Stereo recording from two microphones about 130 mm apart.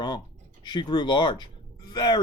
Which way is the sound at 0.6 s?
35° left (ahead or behind).